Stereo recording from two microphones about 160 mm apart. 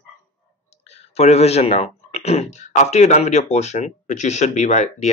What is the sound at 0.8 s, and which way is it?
Speech, 40° left (ahead or behind).